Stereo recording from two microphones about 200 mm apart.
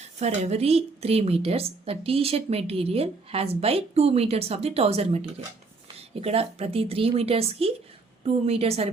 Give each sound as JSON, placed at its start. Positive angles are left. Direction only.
{"t": 0.2, "sound": "a woman's voice", "side_deg": -30}